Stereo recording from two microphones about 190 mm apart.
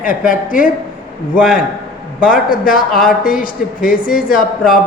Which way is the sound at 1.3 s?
5° right (ahead or behind).